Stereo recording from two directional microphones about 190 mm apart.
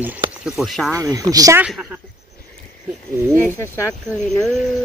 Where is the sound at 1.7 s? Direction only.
5° right (ahead or behind).